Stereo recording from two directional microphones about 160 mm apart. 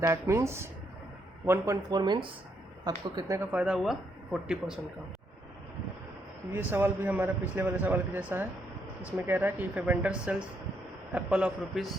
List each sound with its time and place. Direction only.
0.0 s a man's voice: 20° right (ahead or behind)
6.5 s a man's voice: 15° right (ahead or behind)